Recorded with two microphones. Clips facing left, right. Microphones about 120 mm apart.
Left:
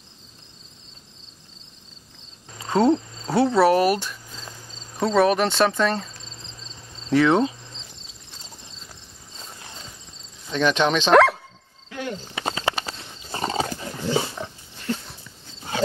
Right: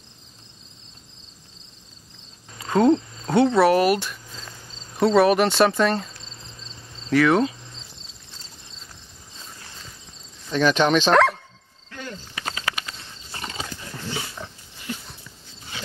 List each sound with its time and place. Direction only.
2.9 s cricket: 10° left (ahead or behind)
4.9 s speech: 5° right (ahead or behind)
7.1 s cricket: 25° left (ahead or behind)
10.5 s speech: 5° right (ahead or behind)
11.9 s cricket: 5° left (ahead or behind)
12.4 s a sound: 25° left (ahead or behind)
13.3 s wild animals: 35° left (ahead or behind)